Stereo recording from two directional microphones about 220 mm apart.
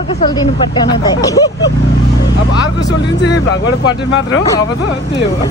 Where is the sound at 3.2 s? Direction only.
50° left (ahead or behind).